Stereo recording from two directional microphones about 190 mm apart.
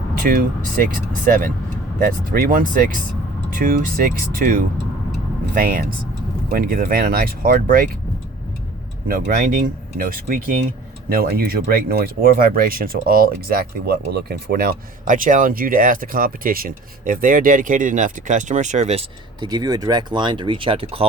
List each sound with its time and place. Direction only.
0.8 s speech: 45° right (ahead or behind)
5.5 s speech: 50° right (ahead or behind)
9.0 s speech: 50° right (ahead or behind)
19.4 s speech: 20° right (ahead or behind)